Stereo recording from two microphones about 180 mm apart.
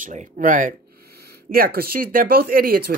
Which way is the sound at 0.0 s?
45° right (ahead or behind).